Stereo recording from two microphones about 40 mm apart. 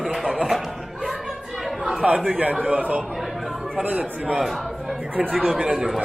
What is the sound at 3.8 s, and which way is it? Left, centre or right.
Speech, right.